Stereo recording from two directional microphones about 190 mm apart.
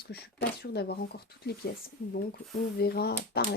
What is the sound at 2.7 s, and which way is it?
Speech, 55° left (ahead or behind).